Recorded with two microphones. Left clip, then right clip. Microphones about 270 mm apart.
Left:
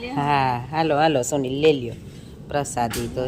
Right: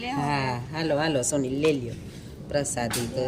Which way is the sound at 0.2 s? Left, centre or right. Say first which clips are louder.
Left 10 dB; centre.